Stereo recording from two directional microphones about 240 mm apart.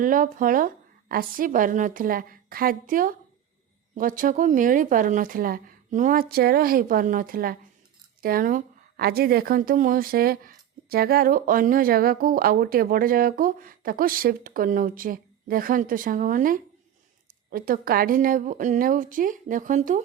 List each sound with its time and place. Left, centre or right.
0.0 s a woman's voice: right